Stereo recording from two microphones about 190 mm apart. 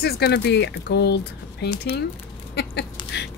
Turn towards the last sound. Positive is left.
turn(degrees=60)  # may be behind; listen again after turning